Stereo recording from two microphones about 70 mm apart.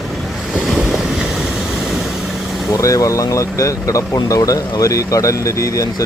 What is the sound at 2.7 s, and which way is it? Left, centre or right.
Speech, left.